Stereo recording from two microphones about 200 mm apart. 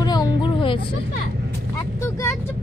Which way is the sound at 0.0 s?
20° left (ahead or behind).